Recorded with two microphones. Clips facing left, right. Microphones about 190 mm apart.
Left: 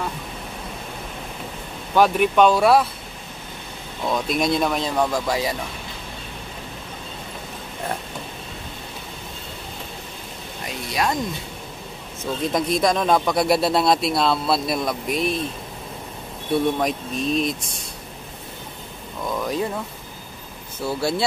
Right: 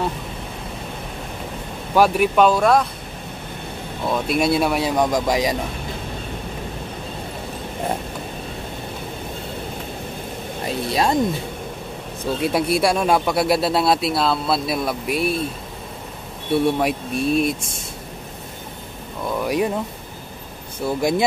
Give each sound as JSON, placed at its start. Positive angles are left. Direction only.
{"t": 2.0, "sound": "speech", "side_deg": -10}
{"t": 4.1, "sound": "speech", "side_deg": -5}
{"t": 10.9, "sound": "speech", "side_deg": -30}
{"t": 12.4, "sound": "speech", "side_deg": -10}
{"t": 16.5, "sound": "speech", "side_deg": -10}
{"t": 19.3, "sound": "speech", "side_deg": -10}
{"t": 20.8, "sound": "speech", "side_deg": -15}